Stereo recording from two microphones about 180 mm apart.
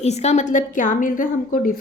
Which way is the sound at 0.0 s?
40° left (ahead or behind).